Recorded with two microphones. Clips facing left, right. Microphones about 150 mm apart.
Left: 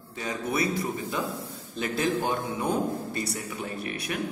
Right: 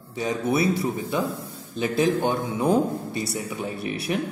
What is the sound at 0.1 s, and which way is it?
Speech, 15° right (ahead or behind).